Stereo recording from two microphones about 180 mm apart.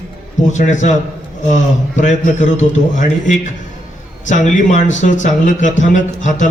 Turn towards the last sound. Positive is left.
turn(degrees=45)  # may be behind; listen again after turning